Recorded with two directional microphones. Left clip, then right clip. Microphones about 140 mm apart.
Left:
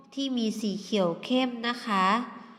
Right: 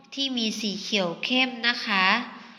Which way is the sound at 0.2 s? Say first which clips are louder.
Right 3 dB; 35° left (ahead or behind).